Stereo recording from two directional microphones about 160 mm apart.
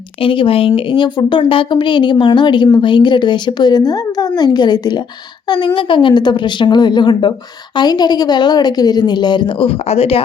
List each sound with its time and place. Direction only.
0.2 s a woman's voice: 35° left (ahead or behind)